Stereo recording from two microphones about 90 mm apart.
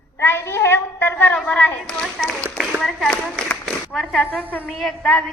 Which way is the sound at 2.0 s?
Centre (ahead or behind).